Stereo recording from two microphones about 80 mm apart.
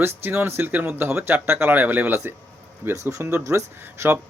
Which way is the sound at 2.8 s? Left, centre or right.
Right.